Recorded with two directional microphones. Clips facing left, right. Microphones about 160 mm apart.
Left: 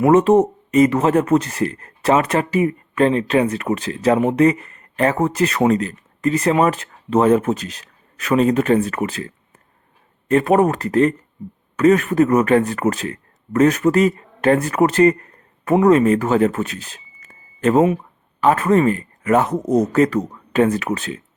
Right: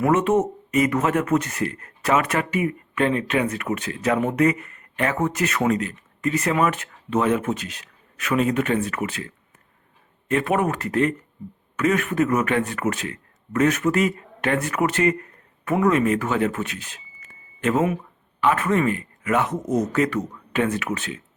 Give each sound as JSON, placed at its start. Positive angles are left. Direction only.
{"t": 0.1, "sound": "speech", "side_deg": 35}